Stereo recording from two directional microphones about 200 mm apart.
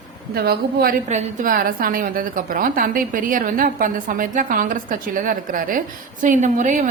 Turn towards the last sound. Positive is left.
turn(degrees=-40)  # may be behind; listen again after turning